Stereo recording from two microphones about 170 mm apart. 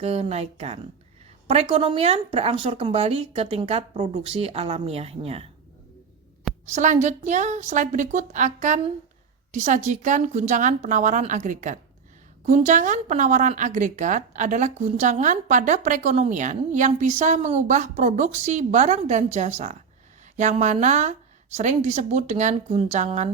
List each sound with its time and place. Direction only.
0.0 s speech: 40° right (ahead or behind)
6.7 s a woman's voice: 45° right (ahead or behind)